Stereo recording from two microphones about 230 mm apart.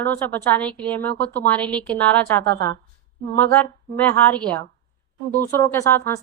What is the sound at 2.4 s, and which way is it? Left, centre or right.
Speech, right.